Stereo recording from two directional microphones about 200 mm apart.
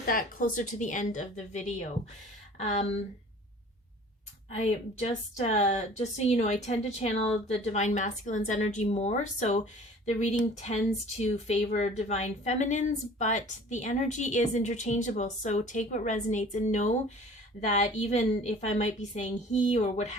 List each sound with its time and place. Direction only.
0.0 s speech: 45° left (ahead or behind)
4.5 s speech: 30° left (ahead or behind)